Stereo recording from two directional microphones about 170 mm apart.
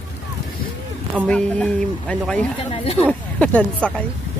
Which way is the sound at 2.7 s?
35° left (ahead or behind).